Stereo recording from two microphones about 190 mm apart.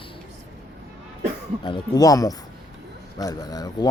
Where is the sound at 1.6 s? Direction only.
20° left (ahead or behind).